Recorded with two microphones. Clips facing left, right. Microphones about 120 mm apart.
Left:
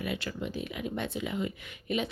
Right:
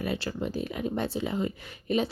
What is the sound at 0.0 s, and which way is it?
Speech, 35° right (ahead or behind).